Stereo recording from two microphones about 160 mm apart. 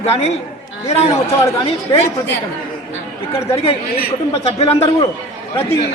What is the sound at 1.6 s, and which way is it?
Speech, 35° left (ahead or behind).